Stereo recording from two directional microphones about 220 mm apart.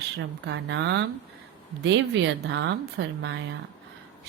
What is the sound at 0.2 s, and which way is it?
A woman's voice, 55° right (ahead or behind).